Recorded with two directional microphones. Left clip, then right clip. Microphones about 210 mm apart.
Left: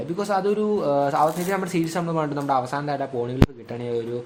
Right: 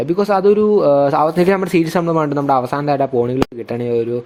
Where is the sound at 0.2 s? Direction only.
35° right (ahead or behind).